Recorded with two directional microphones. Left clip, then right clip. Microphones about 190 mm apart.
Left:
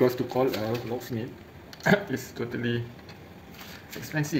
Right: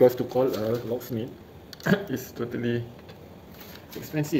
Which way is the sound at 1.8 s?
20° left (ahead or behind).